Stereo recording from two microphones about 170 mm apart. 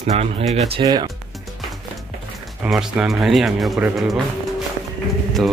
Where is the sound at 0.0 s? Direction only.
40° right (ahead or behind).